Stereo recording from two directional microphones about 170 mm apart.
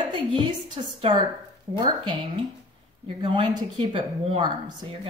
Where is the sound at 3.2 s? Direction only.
30° right (ahead or behind).